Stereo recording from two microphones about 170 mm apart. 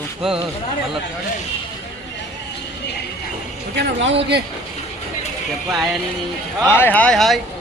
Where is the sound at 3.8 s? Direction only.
90° right.